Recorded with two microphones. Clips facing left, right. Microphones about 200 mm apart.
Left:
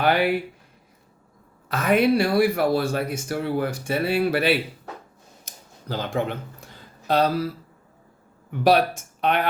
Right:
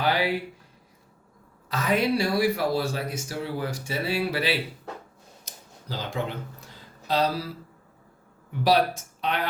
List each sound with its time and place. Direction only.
0.0 s speech: 60° left (ahead or behind)
1.7 s speech: 55° left (ahead or behind)
5.5 s a sound: 55° left (ahead or behind)
5.9 s speech: 55° left (ahead or behind)
8.4 s speech: 55° left (ahead or behind)